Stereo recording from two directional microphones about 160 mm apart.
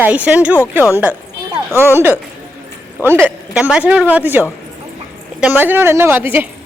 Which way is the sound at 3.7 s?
5° right (ahead or behind).